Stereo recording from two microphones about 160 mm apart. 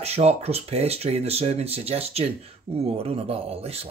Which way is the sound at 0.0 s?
40° right (ahead or behind).